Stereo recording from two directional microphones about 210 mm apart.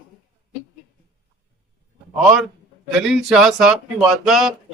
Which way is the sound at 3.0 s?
Centre (ahead or behind).